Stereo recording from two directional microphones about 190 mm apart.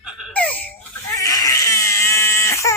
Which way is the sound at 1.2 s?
20° left (ahead or behind).